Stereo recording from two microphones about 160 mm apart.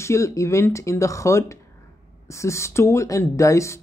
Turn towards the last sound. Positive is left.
turn(degrees=20)  # may be behind; listen again after turning